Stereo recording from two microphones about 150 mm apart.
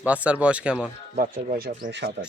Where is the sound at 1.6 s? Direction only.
90° right.